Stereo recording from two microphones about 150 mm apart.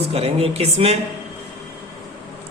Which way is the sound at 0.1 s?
40° right (ahead or behind).